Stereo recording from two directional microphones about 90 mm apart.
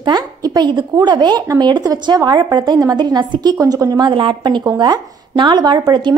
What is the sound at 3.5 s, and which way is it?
Speech, 40° right (ahead or behind).